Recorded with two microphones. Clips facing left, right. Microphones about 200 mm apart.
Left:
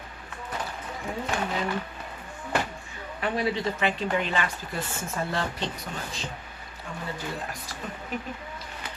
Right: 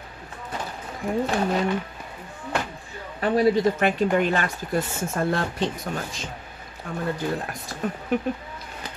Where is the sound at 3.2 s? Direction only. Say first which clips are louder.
Right 8 dB; 45° right (ahead or behind).